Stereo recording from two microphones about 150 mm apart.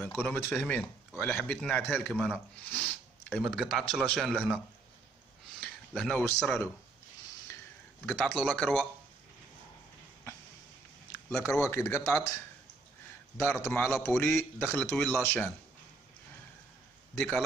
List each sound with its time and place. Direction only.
0.0 s a man's voice: 10° left (ahead or behind)
5.6 s speech: 5° left (ahead or behind)
8.0 s a man's voice: 5° left (ahead or behind)
11.2 s speech: 15° left (ahead or behind)